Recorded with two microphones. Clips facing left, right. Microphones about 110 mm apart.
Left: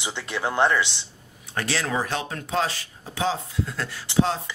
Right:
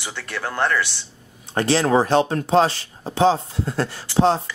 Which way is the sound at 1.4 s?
25° right (ahead or behind).